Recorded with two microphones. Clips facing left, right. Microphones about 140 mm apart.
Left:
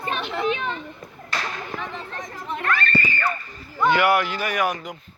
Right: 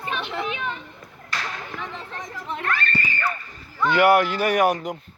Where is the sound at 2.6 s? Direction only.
90° left.